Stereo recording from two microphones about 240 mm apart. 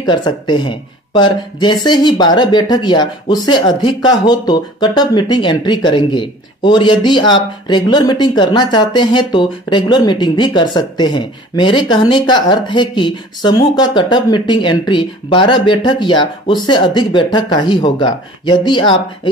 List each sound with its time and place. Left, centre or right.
0.0 s speech: centre